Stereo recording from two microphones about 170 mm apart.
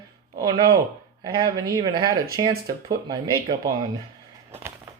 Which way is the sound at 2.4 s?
25° right (ahead or behind).